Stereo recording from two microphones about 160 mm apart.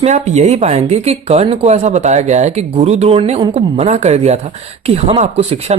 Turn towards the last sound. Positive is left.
turn(degrees=-40)  # may be behind; listen again after turning